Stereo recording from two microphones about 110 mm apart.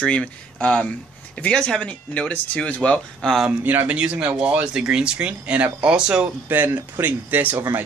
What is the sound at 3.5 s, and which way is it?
Speech, 15° right (ahead or behind).